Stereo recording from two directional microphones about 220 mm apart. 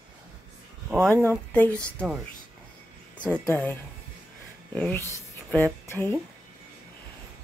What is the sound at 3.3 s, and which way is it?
Speech, 5° left (ahead or behind).